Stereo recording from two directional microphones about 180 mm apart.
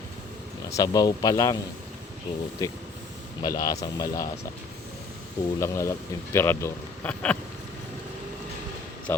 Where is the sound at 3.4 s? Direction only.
20° left (ahead or behind).